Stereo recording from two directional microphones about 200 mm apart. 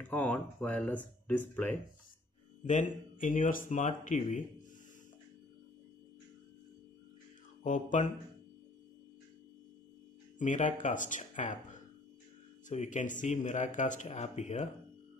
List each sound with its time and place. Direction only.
0.0 s speech: 5° left (ahead or behind)
2.6 s speech: 40° left (ahead or behind)
7.6 s speech: 40° left (ahead or behind)
10.4 s speech: 40° left (ahead or behind)
12.6 s speech: 35° left (ahead or behind)